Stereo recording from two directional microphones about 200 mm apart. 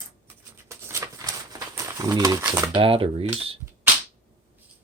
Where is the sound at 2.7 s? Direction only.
25° right (ahead or behind).